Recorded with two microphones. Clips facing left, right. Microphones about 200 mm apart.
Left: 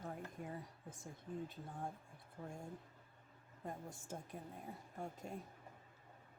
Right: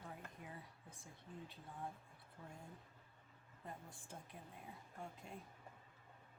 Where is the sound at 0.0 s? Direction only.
45° left (ahead or behind).